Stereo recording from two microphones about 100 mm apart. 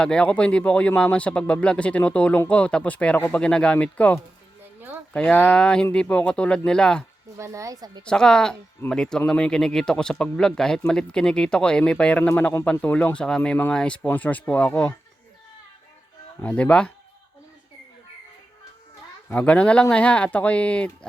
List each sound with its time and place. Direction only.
0.0 s speech: 10° left (ahead or behind)
7.3 s speech: 30° right (ahead or behind)
8.0 s a woman's voice: 5° left (ahead or behind)
16.4 s speech: 10° left (ahead or behind)
19.3 s speech: 15° left (ahead or behind)